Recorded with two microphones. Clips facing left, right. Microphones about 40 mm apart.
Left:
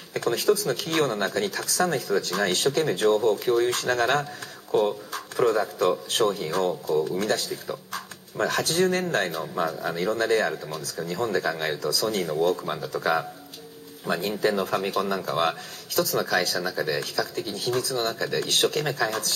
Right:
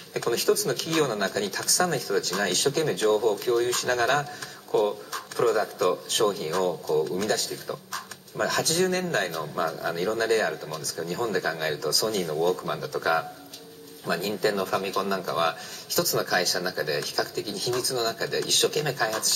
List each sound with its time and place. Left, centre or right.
0.1 s speech: left
6.0 s speech: left
11.8 s speech: left
14.6 s speech: left
15.9 s speech: left